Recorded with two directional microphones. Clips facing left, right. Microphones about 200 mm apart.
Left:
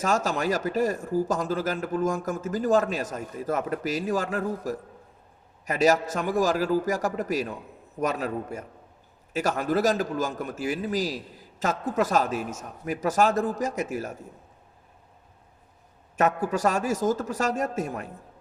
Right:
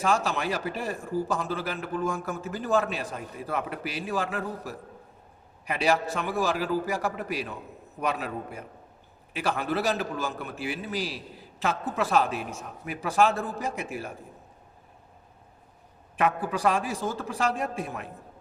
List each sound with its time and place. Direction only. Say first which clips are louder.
0.0 s a man's voice: left 1 dB; 45° left (ahead or behind)
16.1 s a man's voice: left 3 dB; 45° left (ahead or behind)